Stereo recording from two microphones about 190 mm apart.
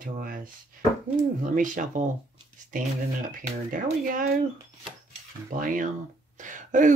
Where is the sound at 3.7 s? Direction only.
45° right (ahead or behind).